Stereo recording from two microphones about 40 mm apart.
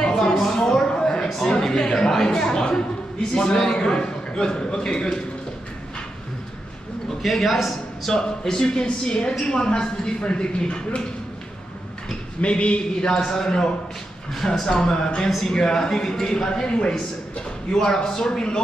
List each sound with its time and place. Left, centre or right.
0.0 s a sound: centre
3.5 s a man's voice: centre
7.2 s a man's voice: centre
8.1 s a man's voice: centre
12.4 s a man's voice: left